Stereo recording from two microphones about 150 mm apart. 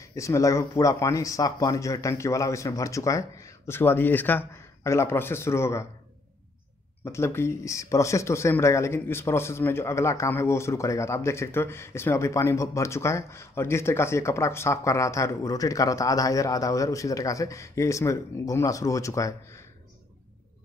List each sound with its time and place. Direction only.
0.0 s speech: 20° left (ahead or behind)
7.1 s speech: 15° left (ahead or behind)